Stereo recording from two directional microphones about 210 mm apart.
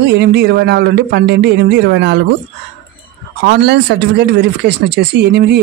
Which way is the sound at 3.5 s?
55° right (ahead or behind).